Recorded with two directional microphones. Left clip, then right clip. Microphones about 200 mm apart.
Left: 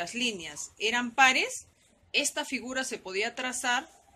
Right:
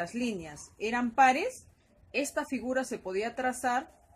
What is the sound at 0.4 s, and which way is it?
Speech, 35° right (ahead or behind).